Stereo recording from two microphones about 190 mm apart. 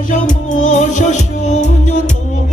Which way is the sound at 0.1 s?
40° left (ahead or behind).